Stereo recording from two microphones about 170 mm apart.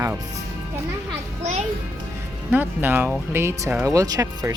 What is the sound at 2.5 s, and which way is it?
Speech, 10° right (ahead or behind).